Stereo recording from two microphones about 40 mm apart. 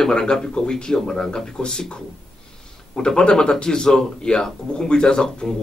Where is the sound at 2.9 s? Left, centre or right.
Left.